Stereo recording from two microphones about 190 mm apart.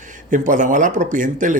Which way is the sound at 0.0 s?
40° right (ahead or behind).